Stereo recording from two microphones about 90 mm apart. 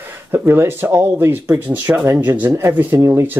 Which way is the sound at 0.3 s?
25° right (ahead or behind).